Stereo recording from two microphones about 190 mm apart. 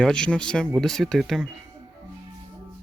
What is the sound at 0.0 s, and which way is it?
Speech, 5° left (ahead or behind).